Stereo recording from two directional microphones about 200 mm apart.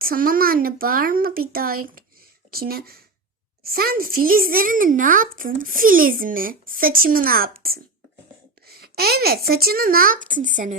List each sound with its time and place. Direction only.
0.0 s a child's voice: 45° right (ahead or behind)